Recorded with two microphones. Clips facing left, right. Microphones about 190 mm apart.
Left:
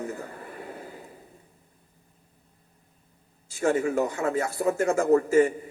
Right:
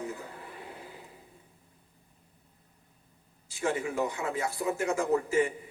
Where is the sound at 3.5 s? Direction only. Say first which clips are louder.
Left 7 dB; 45° left (ahead or behind).